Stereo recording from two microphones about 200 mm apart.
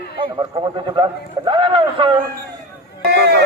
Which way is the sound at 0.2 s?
25° right (ahead or behind).